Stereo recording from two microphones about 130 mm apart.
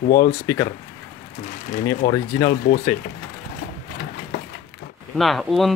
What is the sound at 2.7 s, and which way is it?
Speech, 90° left.